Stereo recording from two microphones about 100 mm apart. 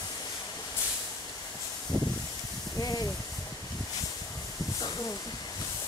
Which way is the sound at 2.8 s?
40° left (ahead or behind).